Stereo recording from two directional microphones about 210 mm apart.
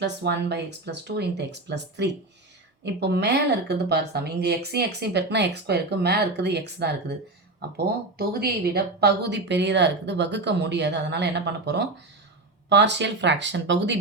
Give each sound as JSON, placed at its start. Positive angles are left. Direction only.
{"t": 0.0, "sound": "a woman's voice", "side_deg": -55}
{"t": 8.3, "sound": "a woman's voice", "side_deg": -50}